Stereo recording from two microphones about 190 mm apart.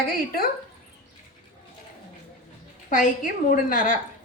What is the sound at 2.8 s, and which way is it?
A woman's voice, 45° left (ahead or behind).